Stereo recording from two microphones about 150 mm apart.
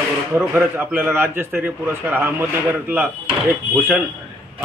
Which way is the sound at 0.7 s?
15° right (ahead or behind).